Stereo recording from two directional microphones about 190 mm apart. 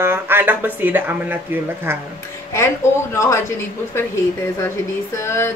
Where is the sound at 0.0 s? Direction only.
10° right (ahead or behind).